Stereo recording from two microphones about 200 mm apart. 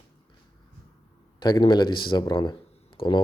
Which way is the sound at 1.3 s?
20° left (ahead or behind).